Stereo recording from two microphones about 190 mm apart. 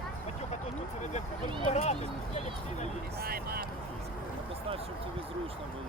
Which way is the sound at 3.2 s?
55° right (ahead or behind).